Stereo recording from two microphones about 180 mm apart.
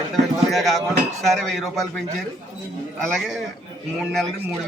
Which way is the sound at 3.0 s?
Centre (ahead or behind).